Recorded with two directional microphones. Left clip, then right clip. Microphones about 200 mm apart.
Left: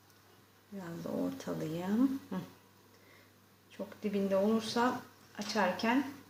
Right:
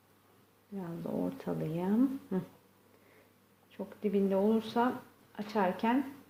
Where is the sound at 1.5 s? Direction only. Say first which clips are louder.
Right 2 dB; 20° right (ahead or behind).